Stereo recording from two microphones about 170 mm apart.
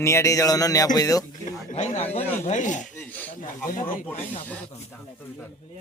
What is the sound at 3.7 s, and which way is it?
Chopping, 50° left (ahead or behind).